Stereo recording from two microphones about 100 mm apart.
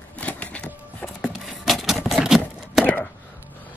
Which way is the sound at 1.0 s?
Centre (ahead or behind).